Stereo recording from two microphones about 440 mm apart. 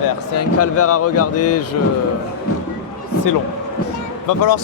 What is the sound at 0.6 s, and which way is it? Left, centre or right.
Speech, left.